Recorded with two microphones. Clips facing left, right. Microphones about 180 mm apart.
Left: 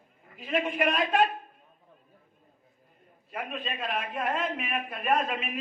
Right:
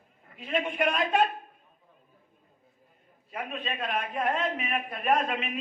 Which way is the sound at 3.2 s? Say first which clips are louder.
Even; centre (ahead or behind).